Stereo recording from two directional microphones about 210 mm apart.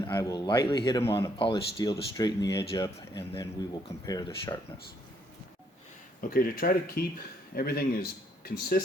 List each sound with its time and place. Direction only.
0.0 s a man's voice: 15° left (ahead or behind)
6.3 s speech: 45° left (ahead or behind)